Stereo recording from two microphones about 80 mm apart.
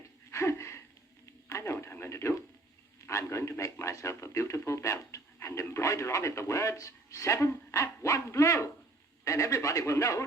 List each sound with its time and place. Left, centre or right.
0.3 s a sound: left
1.5 s radio: left
3.1 s a man's voice: left